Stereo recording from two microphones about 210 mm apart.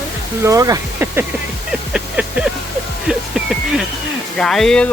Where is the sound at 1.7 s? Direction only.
5° right (ahead or behind).